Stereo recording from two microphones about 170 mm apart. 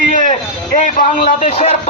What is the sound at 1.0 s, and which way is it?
Speech, 50° left (ahead or behind).